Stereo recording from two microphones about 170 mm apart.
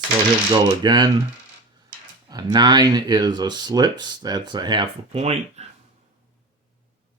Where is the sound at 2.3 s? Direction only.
25° right (ahead or behind).